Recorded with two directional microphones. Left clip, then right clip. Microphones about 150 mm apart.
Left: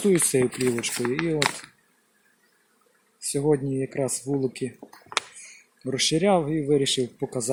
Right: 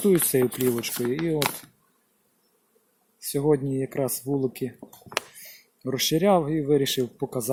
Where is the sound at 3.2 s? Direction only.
15° right (ahead or behind).